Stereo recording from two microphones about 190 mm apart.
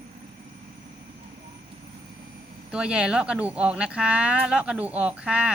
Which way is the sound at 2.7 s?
5° right (ahead or behind).